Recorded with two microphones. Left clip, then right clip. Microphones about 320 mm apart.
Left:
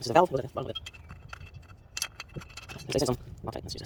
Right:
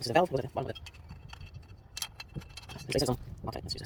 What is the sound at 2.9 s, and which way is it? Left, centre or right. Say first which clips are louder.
Speech: left 2 dB; centre.